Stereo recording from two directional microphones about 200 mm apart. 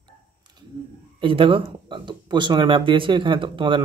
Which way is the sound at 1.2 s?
25° right (ahead or behind).